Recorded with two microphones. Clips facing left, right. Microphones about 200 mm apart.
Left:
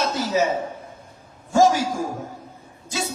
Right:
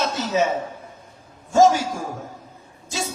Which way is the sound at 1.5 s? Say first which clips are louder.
Right 1 dB; 25° right (ahead or behind).